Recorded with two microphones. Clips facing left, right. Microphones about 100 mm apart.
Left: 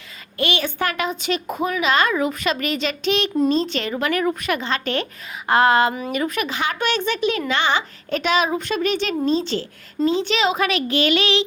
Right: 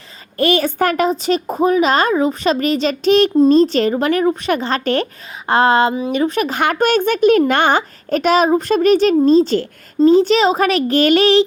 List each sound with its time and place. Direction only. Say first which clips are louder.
0.3 s a woman's voice: right 8 dB; 40° right (ahead or behind)
6.5 s a child's voice: right 7 dB; 50° right (ahead or behind)